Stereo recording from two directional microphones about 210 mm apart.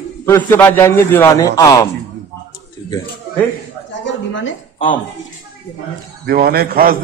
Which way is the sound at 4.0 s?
60° left (ahead or behind).